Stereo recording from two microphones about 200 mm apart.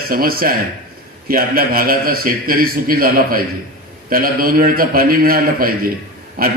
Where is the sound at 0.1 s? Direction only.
45° right (ahead or behind).